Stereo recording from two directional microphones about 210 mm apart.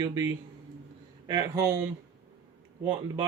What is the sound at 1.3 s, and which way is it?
Speech, 15° right (ahead or behind).